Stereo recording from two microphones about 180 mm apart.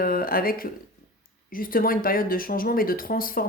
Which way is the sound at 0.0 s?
55° left (ahead or behind).